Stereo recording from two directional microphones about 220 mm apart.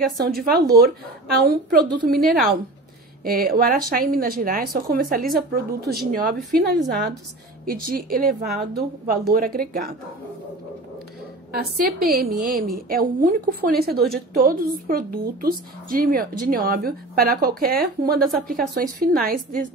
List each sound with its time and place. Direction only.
0.4 s a woman's voice: 45° right (ahead or behind)
11.5 s a woman's voice: 45° right (ahead or behind)